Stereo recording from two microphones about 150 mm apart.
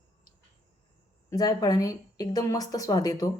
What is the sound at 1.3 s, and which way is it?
Speech, 25° left (ahead or behind).